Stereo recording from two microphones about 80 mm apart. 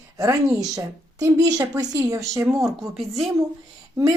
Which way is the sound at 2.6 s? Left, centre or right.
Centre.